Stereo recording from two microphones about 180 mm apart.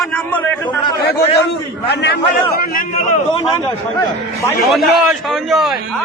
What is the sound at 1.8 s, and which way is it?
Speech, 65° left (ahead or behind).